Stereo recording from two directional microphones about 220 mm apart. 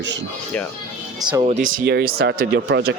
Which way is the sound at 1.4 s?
35° right (ahead or behind).